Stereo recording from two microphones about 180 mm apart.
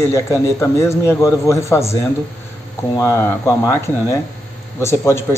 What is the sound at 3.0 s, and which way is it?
Speech, 15° left (ahead or behind).